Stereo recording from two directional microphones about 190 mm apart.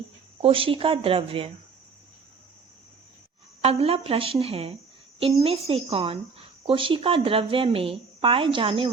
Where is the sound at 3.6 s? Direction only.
30° right (ahead or behind).